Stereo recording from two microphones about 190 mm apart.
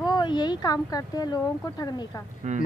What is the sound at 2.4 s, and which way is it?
Speech, 40° right (ahead or behind).